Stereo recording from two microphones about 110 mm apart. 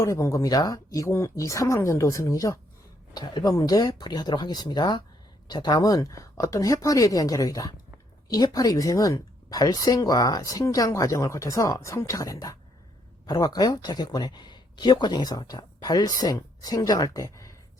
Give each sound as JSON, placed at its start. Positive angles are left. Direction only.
{"t": 0.0, "sound": "speech", "side_deg": 25}